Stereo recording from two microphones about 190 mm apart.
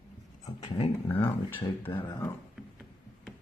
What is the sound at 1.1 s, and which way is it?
Speech, 10° left (ahead or behind).